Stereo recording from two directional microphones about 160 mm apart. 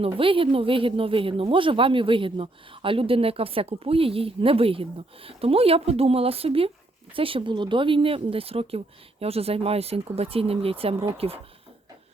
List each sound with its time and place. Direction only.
0.0 s speech: 35° right (ahead or behind)